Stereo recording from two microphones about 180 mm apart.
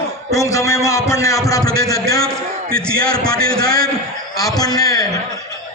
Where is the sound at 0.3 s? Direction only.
15° left (ahead or behind).